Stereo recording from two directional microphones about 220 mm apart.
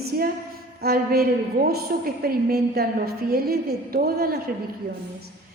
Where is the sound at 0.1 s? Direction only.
40° right (ahead or behind).